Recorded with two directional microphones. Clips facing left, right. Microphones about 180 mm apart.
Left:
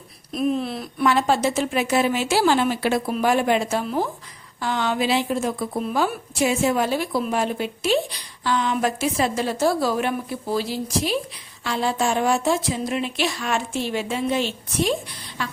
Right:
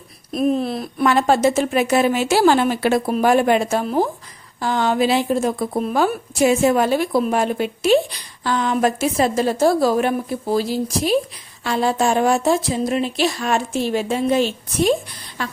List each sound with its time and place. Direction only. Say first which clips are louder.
0.3 s speech: right 4 dB; 40° right (ahead or behind)